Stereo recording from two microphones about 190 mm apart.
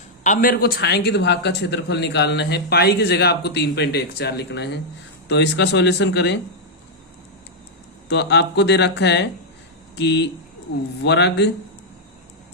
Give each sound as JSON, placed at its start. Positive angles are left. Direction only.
{"t": 0.2, "sound": "speech", "side_deg": 45}
{"t": 8.1, "sound": "speech", "side_deg": 65}